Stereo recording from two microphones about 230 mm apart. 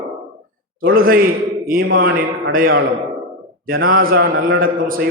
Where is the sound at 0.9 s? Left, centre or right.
Right.